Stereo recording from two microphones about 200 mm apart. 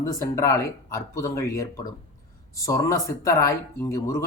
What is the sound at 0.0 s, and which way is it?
Speech, 15° left (ahead or behind).